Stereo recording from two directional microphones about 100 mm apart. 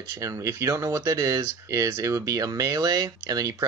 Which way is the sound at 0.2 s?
30° right (ahead or behind).